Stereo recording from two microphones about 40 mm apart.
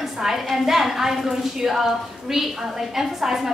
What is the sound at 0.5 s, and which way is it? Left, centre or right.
A woman's voice, centre.